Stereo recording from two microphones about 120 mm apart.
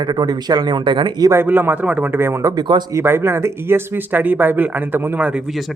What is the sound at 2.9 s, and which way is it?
Speech, 20° right (ahead or behind).